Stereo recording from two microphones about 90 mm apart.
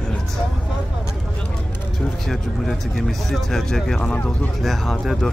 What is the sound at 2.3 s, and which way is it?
Speech, 5° left (ahead or behind).